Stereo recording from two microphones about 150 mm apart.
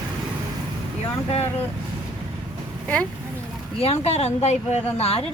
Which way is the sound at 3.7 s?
45° left (ahead or behind).